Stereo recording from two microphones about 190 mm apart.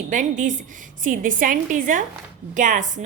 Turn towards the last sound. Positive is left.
turn(degrees=-40)  # may be behind; listen again after turning